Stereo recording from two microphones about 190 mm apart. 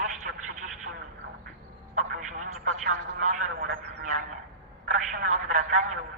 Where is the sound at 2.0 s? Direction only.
40° right (ahead or behind).